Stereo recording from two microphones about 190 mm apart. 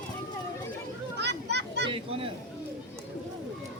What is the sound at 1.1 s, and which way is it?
Children playing, 60° right (ahead or behind).